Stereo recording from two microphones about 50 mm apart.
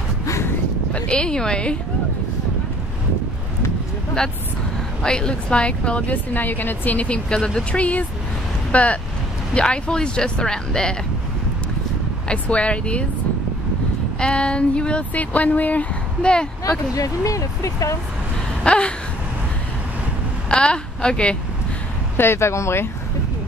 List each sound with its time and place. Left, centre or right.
0.9 s speech: left
5.0 s speech: centre; by 7.2 s left
7.2 s speech: centre
12.3 s speech: left
14.2 s speech: left
16.2 s speech: centre
17.2 s speech: left
18.6 s a sound: left
20.4 s a woman's voice: centre
22.1 s speech: left